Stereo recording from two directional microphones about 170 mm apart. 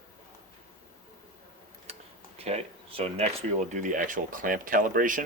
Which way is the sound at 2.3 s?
35° right (ahead or behind).